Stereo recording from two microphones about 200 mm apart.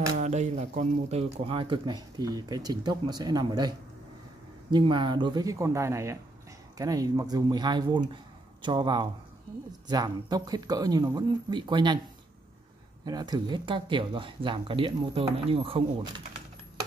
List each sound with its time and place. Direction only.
0.2 s speech: 35° right (ahead or behind)
13.0 s speech: 20° right (ahead or behind)